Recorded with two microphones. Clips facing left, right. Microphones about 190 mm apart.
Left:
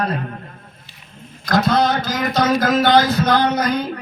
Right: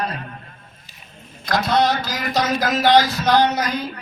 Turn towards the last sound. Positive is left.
turn(degrees=50)  # may be behind; listen again after turning